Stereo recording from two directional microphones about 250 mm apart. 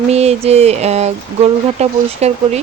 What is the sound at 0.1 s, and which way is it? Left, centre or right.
Speech, right.